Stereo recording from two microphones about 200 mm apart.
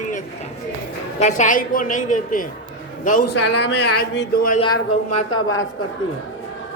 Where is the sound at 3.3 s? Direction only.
60° left (ahead or behind).